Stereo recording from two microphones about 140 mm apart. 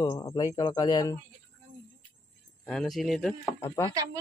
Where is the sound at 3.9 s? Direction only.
25° right (ahead or behind).